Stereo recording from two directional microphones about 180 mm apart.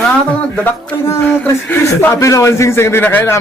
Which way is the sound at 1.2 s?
10° left (ahead or behind).